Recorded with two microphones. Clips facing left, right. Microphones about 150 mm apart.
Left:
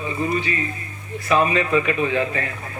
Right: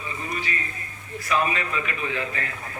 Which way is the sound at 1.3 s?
25° left (ahead or behind).